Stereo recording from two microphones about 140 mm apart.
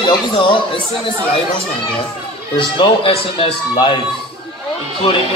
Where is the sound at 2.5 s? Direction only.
40° left (ahead or behind).